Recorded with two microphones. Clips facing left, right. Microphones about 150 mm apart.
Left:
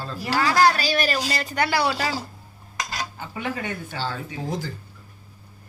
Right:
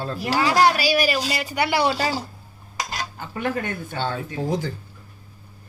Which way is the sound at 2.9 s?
50° right (ahead or behind).